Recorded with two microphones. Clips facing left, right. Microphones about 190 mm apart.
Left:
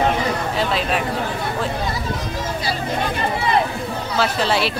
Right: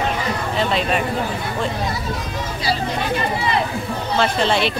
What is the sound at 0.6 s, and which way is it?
Speech, centre (ahead or behind).